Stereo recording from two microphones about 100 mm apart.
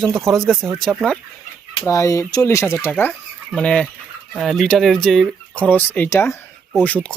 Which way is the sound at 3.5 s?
10° left (ahead or behind).